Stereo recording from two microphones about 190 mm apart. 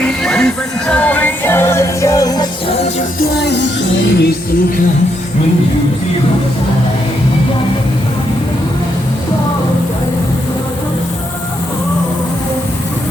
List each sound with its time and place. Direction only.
0.0 s music: 5° left (ahead or behind); by 2.7 s 20° left (ahead or behind)
3.4 s music: 65° left (ahead or behind)